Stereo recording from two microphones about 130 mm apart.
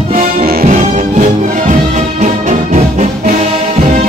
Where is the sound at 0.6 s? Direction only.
80° right; by 3.0 s 65° right (ahead or behind).